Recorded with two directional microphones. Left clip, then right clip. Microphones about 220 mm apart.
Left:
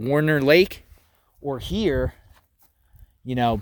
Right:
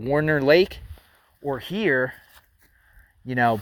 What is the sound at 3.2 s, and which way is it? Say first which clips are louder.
Speech: right 2 dB; 30° left (ahead or behind).